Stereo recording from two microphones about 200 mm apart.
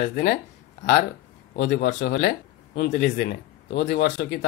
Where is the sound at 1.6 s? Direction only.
60° left (ahead or behind).